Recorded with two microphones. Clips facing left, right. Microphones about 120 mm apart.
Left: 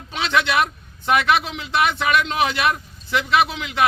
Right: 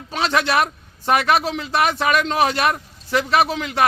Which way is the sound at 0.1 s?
40° right (ahead or behind).